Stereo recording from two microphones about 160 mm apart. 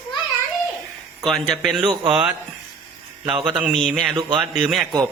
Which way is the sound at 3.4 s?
5° right (ahead or behind).